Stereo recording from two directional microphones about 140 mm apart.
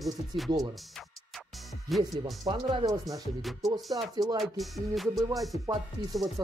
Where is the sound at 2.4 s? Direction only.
30° right (ahead or behind).